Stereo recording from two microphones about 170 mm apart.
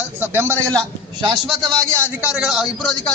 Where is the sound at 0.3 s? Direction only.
15° right (ahead or behind).